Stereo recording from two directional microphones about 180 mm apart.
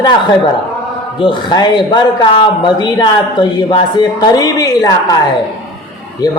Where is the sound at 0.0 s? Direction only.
25° left (ahead or behind).